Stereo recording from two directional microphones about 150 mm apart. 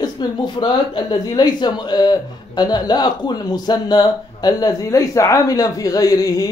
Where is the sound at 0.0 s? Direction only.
30° left (ahead or behind).